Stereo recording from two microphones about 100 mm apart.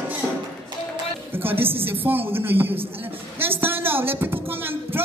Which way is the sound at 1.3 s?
20° right (ahead or behind).